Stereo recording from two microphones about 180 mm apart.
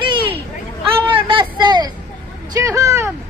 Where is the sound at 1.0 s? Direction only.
30° right (ahead or behind).